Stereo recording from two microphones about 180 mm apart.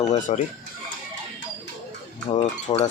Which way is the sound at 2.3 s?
35° left (ahead or behind).